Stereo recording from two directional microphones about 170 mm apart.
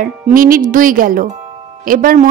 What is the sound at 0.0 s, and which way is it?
Speech, 55° right (ahead or behind).